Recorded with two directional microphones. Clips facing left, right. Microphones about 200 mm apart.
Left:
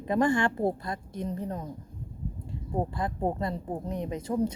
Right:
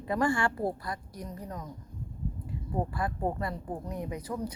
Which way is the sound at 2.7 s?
20° left (ahead or behind).